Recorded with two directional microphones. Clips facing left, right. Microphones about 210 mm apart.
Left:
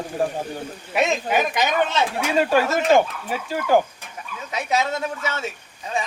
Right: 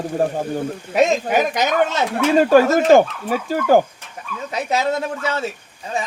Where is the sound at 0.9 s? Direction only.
45° right (ahead or behind).